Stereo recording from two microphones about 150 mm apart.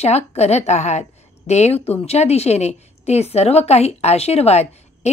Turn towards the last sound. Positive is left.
turn(degrees=45)  # may be behind; listen again after turning